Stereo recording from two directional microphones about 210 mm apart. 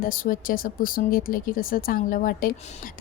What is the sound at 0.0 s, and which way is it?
A woman's voice, 40° left (ahead or behind).